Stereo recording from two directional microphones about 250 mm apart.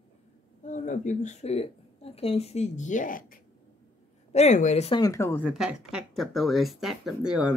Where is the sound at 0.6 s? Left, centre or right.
Left.